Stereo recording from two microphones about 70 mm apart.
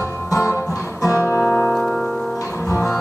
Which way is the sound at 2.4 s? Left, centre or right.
Left.